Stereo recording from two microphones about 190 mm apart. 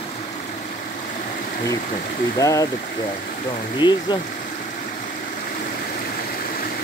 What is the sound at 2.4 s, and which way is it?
Speech, 20° left (ahead or behind).